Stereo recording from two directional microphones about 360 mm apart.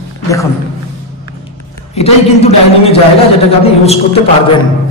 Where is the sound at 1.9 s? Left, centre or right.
Centre.